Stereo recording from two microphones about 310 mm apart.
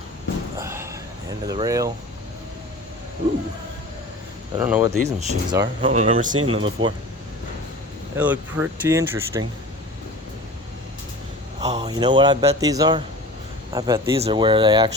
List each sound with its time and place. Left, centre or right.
0.6 s a sound: centre
1.5 s a man's voice: centre
4.5 s a man's voice: centre
4.9 s a man's voice: right
8.1 s a man's voice: centre
11.6 s a man's voice: centre